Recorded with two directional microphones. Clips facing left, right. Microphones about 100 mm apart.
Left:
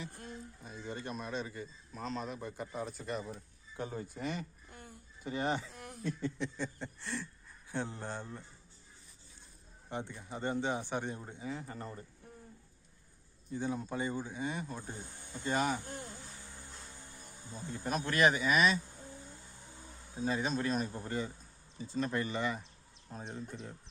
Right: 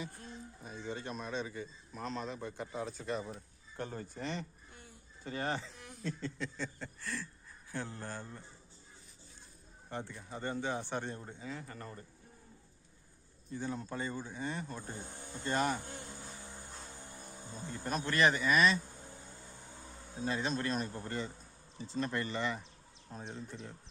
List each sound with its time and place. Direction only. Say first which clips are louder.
0.6 s speech: right 2 dB; centre (ahead or behind)
4.7 s a sound: left 4 dB; 50° left (ahead or behind)
5.2 s speech: left 3 dB; 15° left (ahead or behind)
5.7 s a sound: left 4 dB; 55° left (ahead or behind)
6.0 s speech: left 3 dB; 10° left (ahead or behind)
9.9 s speech: left 2 dB; 15° left (ahead or behind)
13.5 s speech: left 3 dB; 15° left (ahead or behind)
17.5 s speech: left 1 dB; 5° left (ahead or behind)
20.1 s speech: left 2 dB; 5° left (ahead or behind)